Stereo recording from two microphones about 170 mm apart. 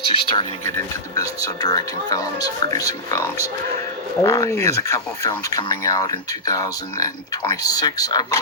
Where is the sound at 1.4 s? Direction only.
20° left (ahead or behind).